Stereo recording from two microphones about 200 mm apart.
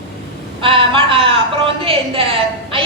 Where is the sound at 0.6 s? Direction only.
25° right (ahead or behind).